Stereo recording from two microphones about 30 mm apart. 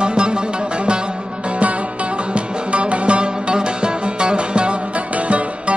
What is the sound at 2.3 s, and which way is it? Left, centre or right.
Music, right.